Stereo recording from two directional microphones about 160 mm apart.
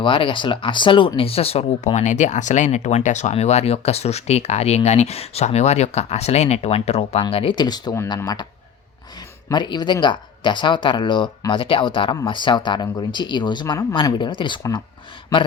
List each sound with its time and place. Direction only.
0.0 s speech: 30° left (ahead or behind)
9.5 s speech: 25° left (ahead or behind)